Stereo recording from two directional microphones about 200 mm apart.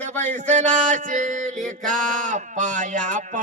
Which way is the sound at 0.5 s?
35° right (ahead or behind).